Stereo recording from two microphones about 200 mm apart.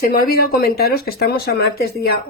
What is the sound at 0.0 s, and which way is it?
Speech, 50° left (ahead or behind).